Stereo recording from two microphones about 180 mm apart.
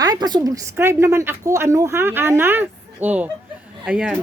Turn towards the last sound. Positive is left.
turn(degrees=-5)  # may be behind; listen again after turning